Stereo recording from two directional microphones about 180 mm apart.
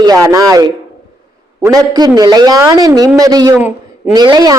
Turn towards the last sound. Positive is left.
turn(degrees=-25)  # may be behind; listen again after turning